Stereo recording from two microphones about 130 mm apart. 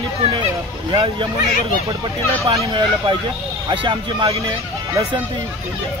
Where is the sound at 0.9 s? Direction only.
40° right (ahead or behind).